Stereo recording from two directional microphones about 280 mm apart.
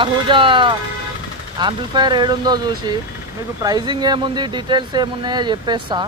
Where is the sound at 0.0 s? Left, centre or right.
Centre.